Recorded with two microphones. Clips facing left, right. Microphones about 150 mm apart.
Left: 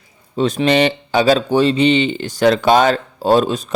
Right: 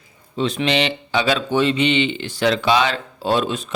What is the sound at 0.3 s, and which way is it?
Speech, 45° left (ahead or behind).